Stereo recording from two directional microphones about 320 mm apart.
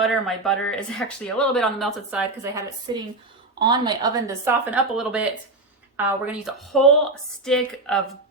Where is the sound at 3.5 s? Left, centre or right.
Centre.